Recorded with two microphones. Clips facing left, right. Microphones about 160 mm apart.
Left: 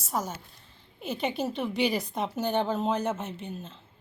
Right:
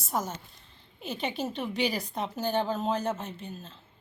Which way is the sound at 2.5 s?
20° left (ahead or behind).